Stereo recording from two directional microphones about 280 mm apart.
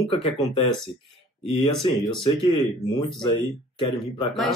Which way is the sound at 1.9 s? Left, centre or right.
Centre.